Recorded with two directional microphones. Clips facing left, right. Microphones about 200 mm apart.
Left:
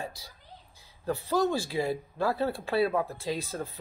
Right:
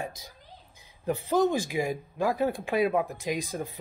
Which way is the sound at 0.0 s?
20° right (ahead or behind).